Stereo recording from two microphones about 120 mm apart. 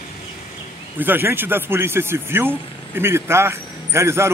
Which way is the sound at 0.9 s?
15° right (ahead or behind).